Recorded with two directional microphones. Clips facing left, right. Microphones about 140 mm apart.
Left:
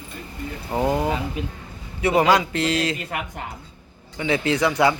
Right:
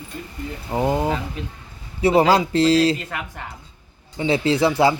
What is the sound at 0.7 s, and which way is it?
Speech, 20° right (ahead or behind).